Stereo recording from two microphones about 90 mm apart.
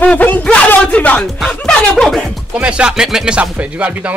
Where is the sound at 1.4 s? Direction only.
5° left (ahead or behind).